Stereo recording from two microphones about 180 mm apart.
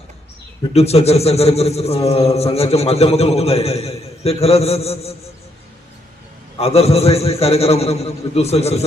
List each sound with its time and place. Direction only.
0.7 s a man's voice: 35° left (ahead or behind)
6.6 s a man's voice: 35° left (ahead or behind)